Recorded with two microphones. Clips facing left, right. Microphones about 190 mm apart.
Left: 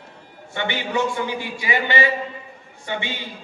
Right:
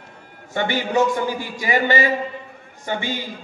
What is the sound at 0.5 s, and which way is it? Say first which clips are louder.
A man's voice: right 4 dB; 40° right (ahead or behind).